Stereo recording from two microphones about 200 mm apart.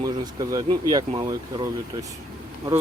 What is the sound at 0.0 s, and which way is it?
Speech, 20° right (ahead or behind).